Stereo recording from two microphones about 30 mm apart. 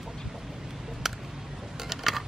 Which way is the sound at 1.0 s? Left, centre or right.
Centre.